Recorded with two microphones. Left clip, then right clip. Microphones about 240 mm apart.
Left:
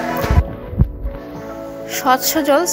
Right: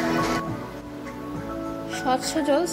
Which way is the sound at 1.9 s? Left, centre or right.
Centre.